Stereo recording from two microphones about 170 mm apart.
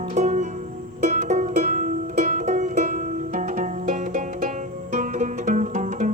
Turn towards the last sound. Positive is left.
turn(degrees=-45)  # may be behind; listen again after turning